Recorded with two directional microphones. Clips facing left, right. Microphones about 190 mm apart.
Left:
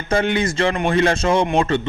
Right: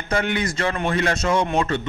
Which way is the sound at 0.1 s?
30° left (ahead or behind).